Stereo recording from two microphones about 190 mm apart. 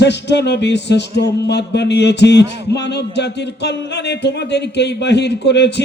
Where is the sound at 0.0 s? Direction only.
65° left (ahead or behind).